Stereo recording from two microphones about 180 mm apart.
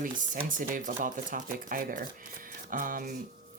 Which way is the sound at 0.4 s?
45° right (ahead or behind).